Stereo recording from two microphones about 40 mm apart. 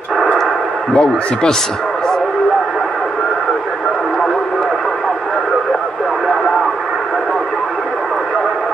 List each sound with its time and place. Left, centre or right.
0.9 s speech: left